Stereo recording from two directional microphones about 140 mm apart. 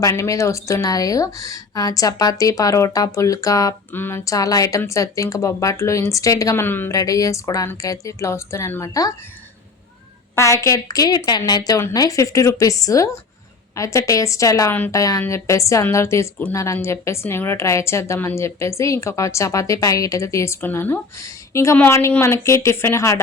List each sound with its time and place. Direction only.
0.0 s a woman's voice: 25° left (ahead or behind)
10.3 s a woman's voice: 20° left (ahead or behind)